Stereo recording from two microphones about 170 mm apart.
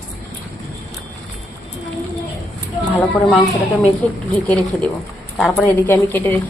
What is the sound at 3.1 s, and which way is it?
Speech, 5° left (ahead or behind).